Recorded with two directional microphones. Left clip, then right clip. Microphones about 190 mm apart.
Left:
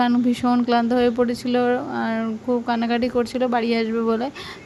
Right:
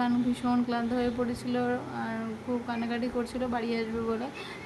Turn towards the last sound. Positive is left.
turn(degrees=40)  # may be behind; listen again after turning